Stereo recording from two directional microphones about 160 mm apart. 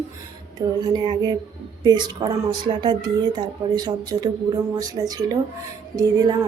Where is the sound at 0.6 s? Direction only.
25° right (ahead or behind).